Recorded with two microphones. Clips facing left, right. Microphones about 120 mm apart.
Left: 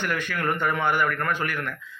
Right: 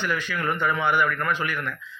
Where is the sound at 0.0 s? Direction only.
55° left (ahead or behind).